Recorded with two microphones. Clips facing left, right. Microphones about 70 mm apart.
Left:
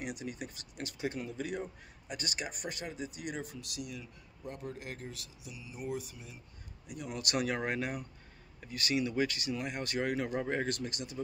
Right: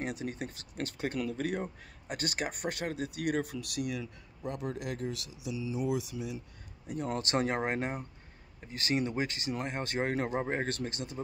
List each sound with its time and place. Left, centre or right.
0.0 s speech: right
4.0 s speech: right
6.9 s speech: right